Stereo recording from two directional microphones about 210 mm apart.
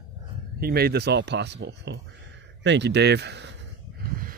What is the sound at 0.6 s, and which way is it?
Speech, 45° right (ahead or behind).